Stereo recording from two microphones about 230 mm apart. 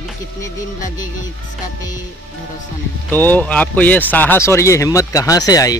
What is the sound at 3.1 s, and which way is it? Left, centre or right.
Speech, centre.